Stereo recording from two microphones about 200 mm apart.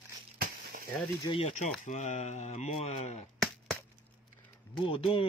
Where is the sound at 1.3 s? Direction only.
30° left (ahead or behind).